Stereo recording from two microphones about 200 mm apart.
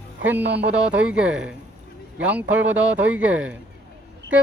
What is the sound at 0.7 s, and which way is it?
Speech, 5° right (ahead or behind).